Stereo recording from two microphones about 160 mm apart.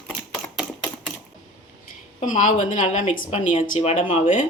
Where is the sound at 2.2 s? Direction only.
50° left (ahead or behind).